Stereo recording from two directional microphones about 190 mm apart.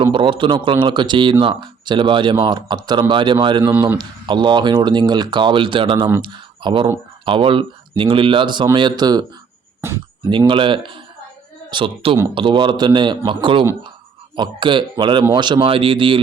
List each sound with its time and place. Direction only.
0.0 s speech: 25° right (ahead or behind)
10.2 s speech: 25° right (ahead or behind)